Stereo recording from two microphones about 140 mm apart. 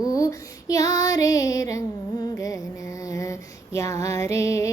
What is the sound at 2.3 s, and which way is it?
Music, 25° left (ahead or behind).